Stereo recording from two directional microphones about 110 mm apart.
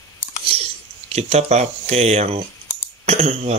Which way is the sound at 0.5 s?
65° right (ahead or behind).